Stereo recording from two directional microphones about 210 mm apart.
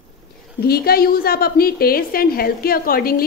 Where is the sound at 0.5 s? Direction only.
50° left (ahead or behind).